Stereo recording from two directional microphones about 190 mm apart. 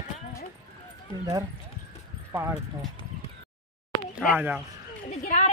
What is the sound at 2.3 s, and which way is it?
Speech, 10° right (ahead or behind).